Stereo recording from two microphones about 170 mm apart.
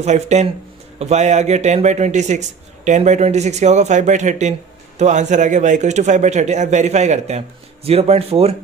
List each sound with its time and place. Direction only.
0.0 s a man's voice: 40° right (ahead or behind)